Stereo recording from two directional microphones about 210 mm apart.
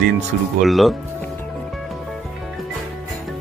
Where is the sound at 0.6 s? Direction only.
Centre (ahead or behind).